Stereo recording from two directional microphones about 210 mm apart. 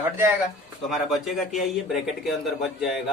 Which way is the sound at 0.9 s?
Centre (ahead or behind).